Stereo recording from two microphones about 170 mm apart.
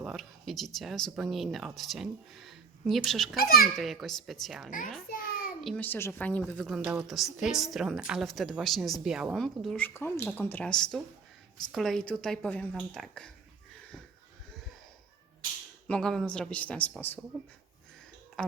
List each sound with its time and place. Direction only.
0.0 s a woman's voice: centre (ahead or behind)
3.3 s a child's voice: 60° left (ahead or behind)
3.8 s a woman's voice: centre (ahead or behind)
15.9 s a woman's voice: 5° left (ahead or behind)
18.4 s speech: 5° left (ahead or behind)